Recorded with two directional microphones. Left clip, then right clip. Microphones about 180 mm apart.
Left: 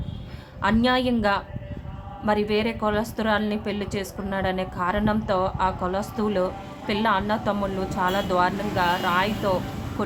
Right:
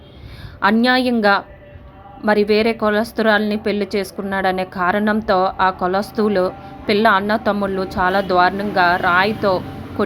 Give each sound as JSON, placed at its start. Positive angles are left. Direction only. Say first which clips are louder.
{"t": 0.6, "sound": "a woman's voice", "louder": "right 7 dB", "side_deg": -30}